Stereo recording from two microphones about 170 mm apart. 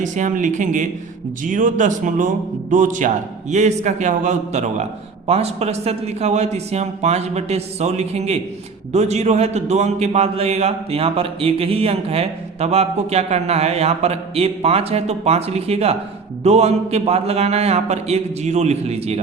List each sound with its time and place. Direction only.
0.0 s a man's voice: 50° right (ahead or behind)